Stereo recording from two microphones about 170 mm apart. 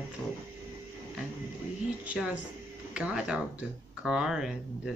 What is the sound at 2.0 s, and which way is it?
A woman's voice, 5° right (ahead or behind).